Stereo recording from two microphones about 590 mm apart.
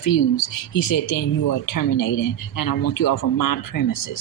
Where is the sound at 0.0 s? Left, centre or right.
Left.